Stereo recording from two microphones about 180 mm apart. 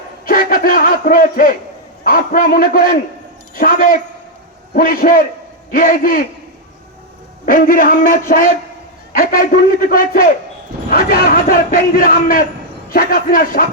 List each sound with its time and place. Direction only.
0.3 s a man's voice: 50° left (ahead or behind)
7.4 s a man's voice: 50° left (ahead or behind)